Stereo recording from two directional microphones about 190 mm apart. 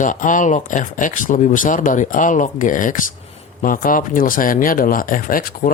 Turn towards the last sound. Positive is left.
turn(degrees=45)  # may be behind; listen again after turning